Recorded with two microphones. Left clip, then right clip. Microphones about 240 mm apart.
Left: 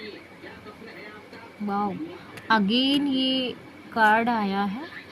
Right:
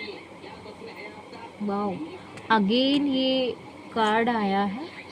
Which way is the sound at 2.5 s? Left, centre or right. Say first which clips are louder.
Even; left.